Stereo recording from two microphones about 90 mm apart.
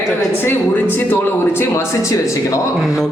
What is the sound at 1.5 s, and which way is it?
Speech, 35° left (ahead or behind).